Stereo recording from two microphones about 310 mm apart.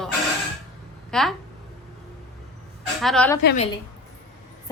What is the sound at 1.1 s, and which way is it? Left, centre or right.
Speech, centre.